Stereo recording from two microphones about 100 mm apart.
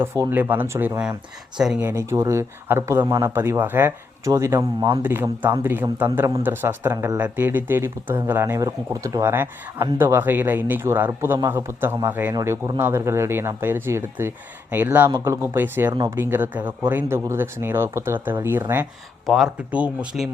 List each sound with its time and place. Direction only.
0.0 s speech: 25° right (ahead or behind); by 1.8 s 5° right (ahead or behind)
1.8 s speech: 25° right (ahead or behind)
4.3 s speech: 30° right (ahead or behind)
8.5 s speech: 35° right (ahead or behind)
9.2 s speech: 20° right (ahead or behind)
19.2 s speech: centre (ahead or behind)
19.5 s speech: 15° right (ahead or behind)